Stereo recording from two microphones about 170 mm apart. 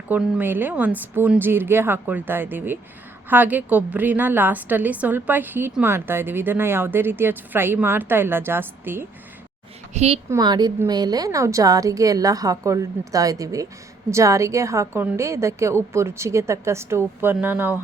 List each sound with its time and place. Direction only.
0.1 s a woman's voice: 10° right (ahead or behind)
9.9 s a woman's voice: 40° right (ahead or behind)
10.2 s a woman's voice: 20° right (ahead or behind)